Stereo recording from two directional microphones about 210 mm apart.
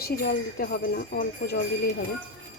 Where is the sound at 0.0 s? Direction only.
45° left (ahead or behind).